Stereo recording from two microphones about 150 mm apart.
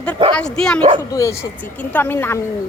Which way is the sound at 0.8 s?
40° right (ahead or behind).